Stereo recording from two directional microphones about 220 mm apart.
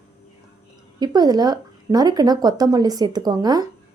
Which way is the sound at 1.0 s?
20° right (ahead or behind).